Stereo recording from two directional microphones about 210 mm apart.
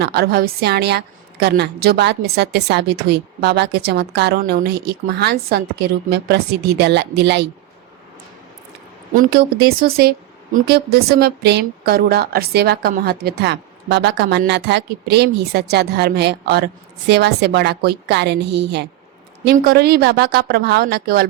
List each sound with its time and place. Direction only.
0.0 s a woman's voice: 50° right (ahead or behind)
9.1 s a woman's voice: 45° right (ahead or behind)